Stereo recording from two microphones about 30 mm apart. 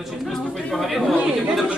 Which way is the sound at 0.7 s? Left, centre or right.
Centre.